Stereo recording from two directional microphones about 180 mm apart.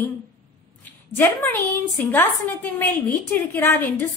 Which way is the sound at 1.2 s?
10° left (ahead or behind).